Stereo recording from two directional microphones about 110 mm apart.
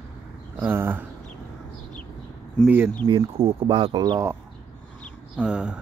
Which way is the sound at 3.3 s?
55° right (ahead or behind).